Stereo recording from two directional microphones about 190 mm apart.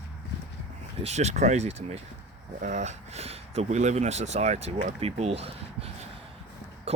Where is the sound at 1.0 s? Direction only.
35° right (ahead or behind).